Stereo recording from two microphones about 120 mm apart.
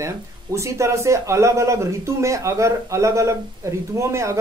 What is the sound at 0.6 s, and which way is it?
A man's voice, 25° right (ahead or behind).